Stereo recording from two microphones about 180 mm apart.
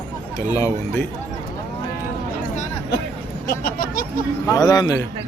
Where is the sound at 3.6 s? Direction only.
55° left (ahead or behind).